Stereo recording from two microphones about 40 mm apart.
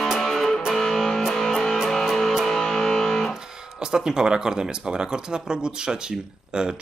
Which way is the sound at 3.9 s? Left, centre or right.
Centre.